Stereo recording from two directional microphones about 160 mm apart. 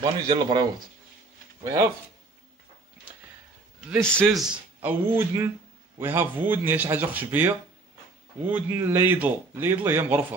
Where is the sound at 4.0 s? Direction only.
5° left (ahead or behind).